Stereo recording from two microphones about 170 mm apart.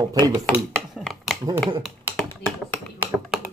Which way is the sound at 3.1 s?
Centre (ahead or behind).